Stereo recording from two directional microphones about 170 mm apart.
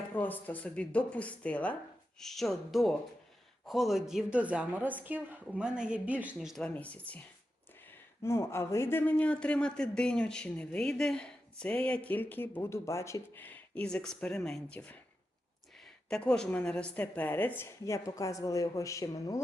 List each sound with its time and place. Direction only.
0.1 s a woman's voice: 10° left (ahead or behind)
8.2 s speech: 15° left (ahead or behind)
16.0 s speech: 5° left (ahead or behind); by 19.4 s 20° left (ahead or behind)